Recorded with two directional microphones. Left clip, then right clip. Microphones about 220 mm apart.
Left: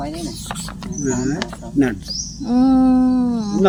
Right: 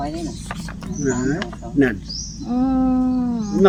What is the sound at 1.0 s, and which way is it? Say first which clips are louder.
Speech: even; centre (ahead or behind).